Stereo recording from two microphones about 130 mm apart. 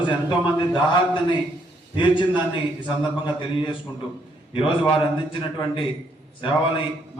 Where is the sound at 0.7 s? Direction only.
40° left (ahead or behind).